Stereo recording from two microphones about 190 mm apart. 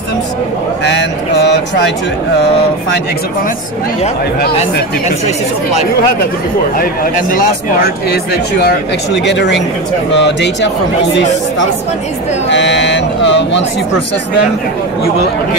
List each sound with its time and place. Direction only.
0.8 s a sound: 65° left (ahead or behind)
6.8 s speech: 45° left (ahead or behind); by 10.7 s 65° left (ahead or behind)
12.4 s speech: 70° left (ahead or behind)